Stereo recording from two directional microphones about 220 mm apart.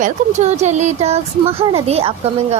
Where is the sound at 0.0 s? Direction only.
30° right (ahead or behind).